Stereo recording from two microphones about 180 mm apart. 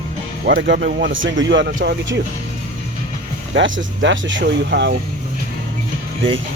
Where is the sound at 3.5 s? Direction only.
90° right.